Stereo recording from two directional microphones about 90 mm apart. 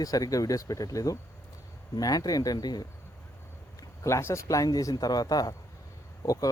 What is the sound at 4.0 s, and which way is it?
Speech, 30° left (ahead or behind).